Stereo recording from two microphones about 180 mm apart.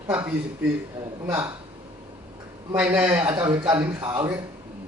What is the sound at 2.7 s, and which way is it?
Speech, 5° right (ahead or behind).